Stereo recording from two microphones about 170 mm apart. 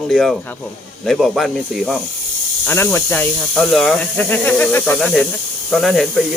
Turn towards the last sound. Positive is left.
turn(degrees=0)  # may be behind; listen again after turning